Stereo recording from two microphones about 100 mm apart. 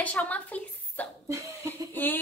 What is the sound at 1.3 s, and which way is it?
Cough, 30° right (ahead or behind).